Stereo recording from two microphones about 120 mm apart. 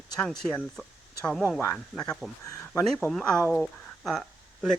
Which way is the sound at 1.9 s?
5° left (ahead or behind).